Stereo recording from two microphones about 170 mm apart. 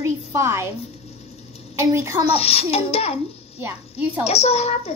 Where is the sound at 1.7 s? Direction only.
15° right (ahead or behind).